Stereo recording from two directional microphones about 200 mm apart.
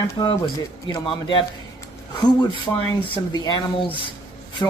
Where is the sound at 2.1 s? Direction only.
20° left (ahead or behind).